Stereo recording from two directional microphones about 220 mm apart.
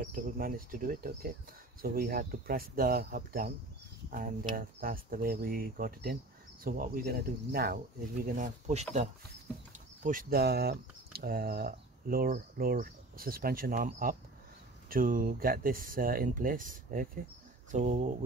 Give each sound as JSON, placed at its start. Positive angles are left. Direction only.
{"t": 0.0, "sound": "speech", "side_deg": -40}